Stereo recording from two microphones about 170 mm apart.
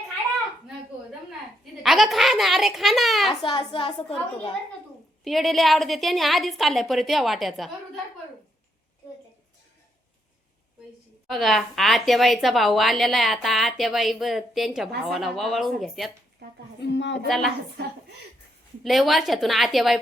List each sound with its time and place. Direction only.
1.8 s a sound: centre (ahead or behind)
3.4 s a woman's voice: 30° left (ahead or behind)
5.2 s a woman's voice: centre (ahead or behind)
11.3 s a woman's voice: centre (ahead or behind)
16.8 s speech: 90° left
17.2 s a woman's voice: centre (ahead or behind)
18.8 s a woman's voice: centre (ahead or behind)